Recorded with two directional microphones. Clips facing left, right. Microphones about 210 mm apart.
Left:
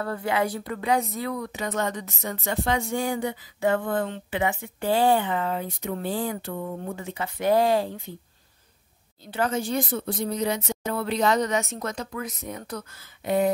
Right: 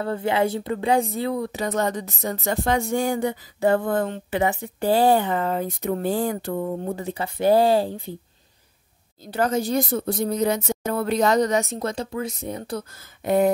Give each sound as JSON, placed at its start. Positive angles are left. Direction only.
{"t": 0.0, "sound": "speech", "side_deg": -25}
{"t": 9.2, "sound": "speech", "side_deg": -40}
{"t": 13.2, "sound": "a sound", "side_deg": -50}